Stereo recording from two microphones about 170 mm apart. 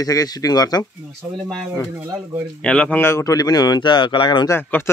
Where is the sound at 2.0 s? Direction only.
15° right (ahead or behind).